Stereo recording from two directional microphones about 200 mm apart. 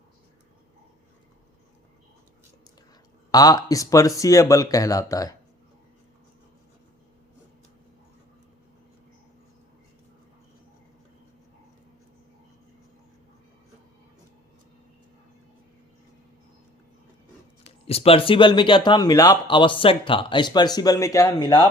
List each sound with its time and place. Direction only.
3.3 s speech: 20° left (ahead or behind)
17.8 s speech: 30° left (ahead or behind)